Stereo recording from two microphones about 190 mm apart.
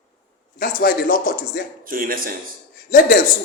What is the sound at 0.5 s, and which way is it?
A man's voice, 50° left (ahead or behind).